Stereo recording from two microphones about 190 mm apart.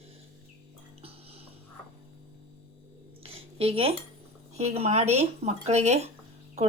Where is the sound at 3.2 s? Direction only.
30° right (ahead or behind).